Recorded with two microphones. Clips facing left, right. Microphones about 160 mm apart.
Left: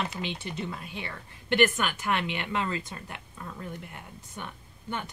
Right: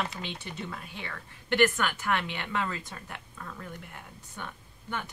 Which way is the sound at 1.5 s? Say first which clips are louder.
Left 1 dB; 20° left (ahead or behind).